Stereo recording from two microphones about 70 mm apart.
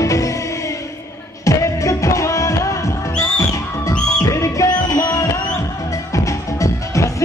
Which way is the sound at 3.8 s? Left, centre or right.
Left.